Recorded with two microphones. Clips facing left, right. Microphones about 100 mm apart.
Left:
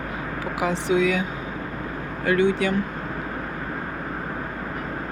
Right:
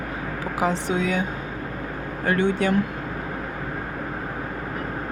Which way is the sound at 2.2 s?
30° right (ahead or behind).